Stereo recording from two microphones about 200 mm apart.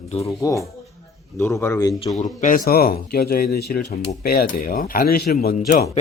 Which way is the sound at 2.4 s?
45° left (ahead or behind).